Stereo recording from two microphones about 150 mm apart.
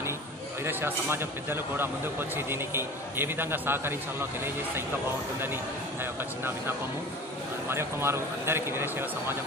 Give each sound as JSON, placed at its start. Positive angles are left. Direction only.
{"t": 0.7, "sound": "speech", "side_deg": -15}
{"t": 7.7, "sound": "speech", "side_deg": -15}